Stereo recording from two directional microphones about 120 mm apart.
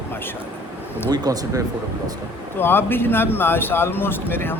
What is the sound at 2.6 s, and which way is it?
Speech, 20° left (ahead or behind).